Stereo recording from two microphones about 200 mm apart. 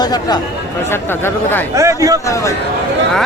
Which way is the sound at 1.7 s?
15° right (ahead or behind).